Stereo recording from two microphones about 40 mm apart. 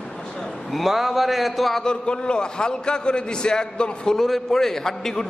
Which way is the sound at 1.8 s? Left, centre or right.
Left.